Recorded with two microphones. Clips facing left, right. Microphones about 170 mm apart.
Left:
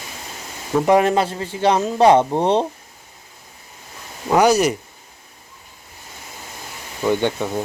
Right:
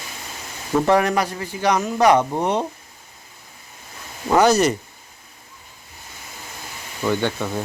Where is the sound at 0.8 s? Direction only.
20° left (ahead or behind).